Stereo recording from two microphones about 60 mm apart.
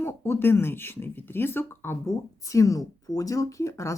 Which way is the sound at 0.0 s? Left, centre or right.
Left.